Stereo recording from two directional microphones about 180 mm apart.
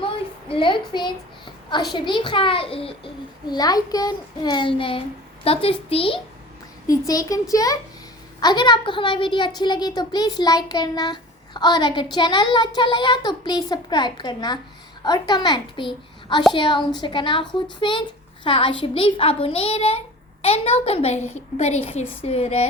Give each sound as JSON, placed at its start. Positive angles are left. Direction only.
{"t": 0.0, "sound": "a sound", "side_deg": 30}
{"t": 1.9, "sound": "a child's voice", "side_deg": 25}
{"t": 6.8, "sound": "a child's voice", "side_deg": 20}